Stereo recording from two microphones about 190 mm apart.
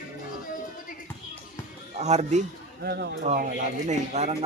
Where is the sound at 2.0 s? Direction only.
35° right (ahead or behind).